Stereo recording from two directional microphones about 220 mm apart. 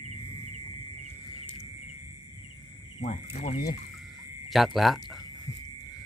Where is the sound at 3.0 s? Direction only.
30° left (ahead or behind).